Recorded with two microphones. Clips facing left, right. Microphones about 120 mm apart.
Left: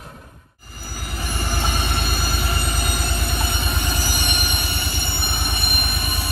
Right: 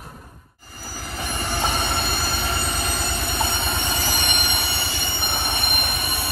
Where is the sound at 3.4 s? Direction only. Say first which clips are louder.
Right 2 dB; 30° right (ahead or behind).